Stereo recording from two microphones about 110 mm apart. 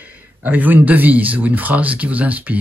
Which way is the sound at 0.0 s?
15° right (ahead or behind).